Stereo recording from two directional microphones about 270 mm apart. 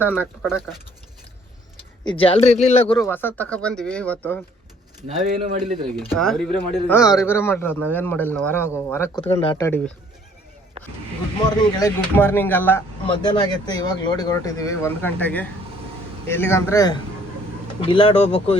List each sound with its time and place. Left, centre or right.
0.0 s speech: centre
2.0 s speech: centre
5.0 s speech: right
6.1 s speech: centre
11.4 s speech: centre